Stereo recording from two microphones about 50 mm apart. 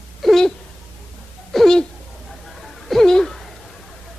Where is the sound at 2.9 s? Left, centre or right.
Centre.